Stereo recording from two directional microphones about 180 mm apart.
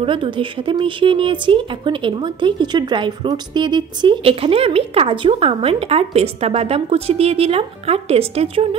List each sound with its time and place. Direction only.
0.0 s speech: 30° right (ahead or behind)